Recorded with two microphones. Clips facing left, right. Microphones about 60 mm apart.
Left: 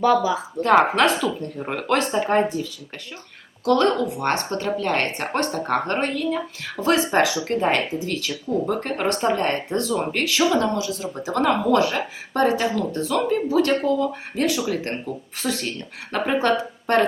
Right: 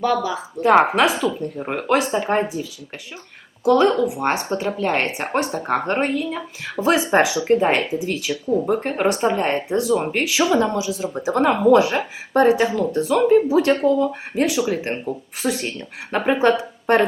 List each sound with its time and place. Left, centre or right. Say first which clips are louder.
0.0 s speech: left 2 dB; centre
0.6 s speech: right 2 dB; centre